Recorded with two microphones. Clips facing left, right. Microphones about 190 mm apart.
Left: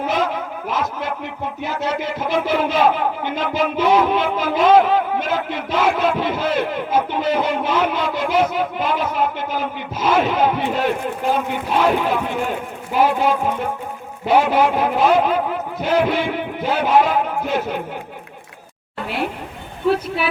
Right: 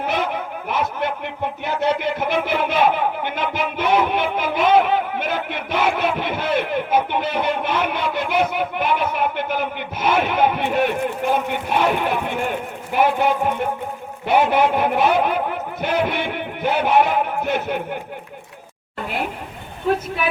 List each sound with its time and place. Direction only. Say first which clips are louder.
0.0 s a sound: left 2 dB; 60° right (ahead or behind)
0.7 s music: right 1 dB; 60° right (ahead or behind)
14.5 s music: left 1 dB; 60° right (ahead or behind)